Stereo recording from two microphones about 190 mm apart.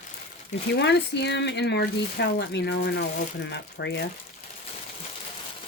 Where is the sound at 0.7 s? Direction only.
65° left (ahead or behind).